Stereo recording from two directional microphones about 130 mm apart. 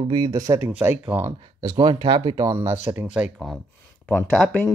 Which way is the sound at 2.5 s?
15° right (ahead or behind).